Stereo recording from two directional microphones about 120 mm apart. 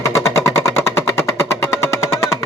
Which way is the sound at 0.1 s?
25° left (ahead or behind).